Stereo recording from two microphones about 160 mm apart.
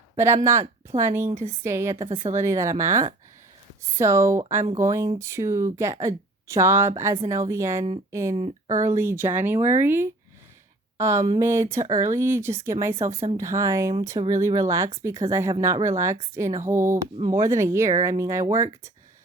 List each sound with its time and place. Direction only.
0.4 s speech: 15° right (ahead or behind)
8.4 s speech: 35° right (ahead or behind)
8.8 s speech: 15° right (ahead or behind)